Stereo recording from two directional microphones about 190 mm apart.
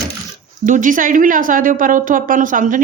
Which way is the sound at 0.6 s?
45° right (ahead or behind).